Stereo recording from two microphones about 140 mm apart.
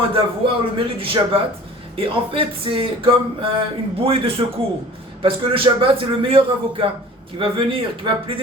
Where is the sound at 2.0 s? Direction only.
40° right (ahead or behind).